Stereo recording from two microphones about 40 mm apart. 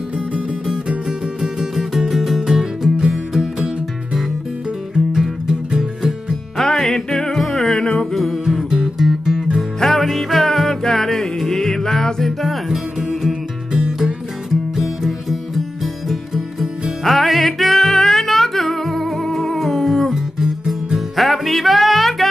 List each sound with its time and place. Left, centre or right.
1.4 s music: centre
4.9 s music: centre
6.6 s music: centre
8.5 s music: centre
9.8 s music: centre
13.3 s music: centre
15.0 s music: centre
20.3 s music: centre
21.2 s music: centre